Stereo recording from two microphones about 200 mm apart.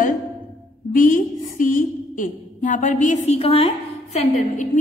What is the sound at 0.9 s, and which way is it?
A woman's voice, 40° left (ahead or behind).